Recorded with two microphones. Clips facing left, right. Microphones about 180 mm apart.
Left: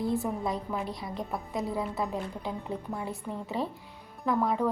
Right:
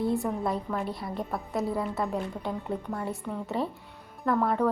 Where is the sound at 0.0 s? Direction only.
Centre (ahead or behind).